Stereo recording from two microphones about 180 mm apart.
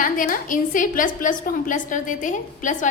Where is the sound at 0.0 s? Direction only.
50° left (ahead or behind).